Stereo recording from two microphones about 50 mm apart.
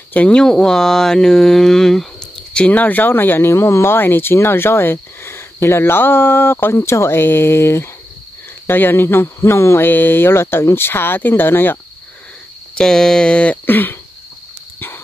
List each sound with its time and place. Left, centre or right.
0.3 s speech: centre
2.5 s speech: left
8.6 s speech: left
9.8 s speech: left
12.7 s speech: centre
13.7 s throat clearing: left